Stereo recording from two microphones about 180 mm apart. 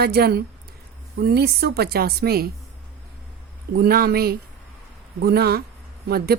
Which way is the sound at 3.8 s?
60° right (ahead or behind).